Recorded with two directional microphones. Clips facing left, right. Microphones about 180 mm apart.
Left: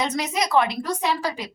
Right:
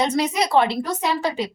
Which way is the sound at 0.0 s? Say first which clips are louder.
Right 4 dB; 30° right (ahead or behind).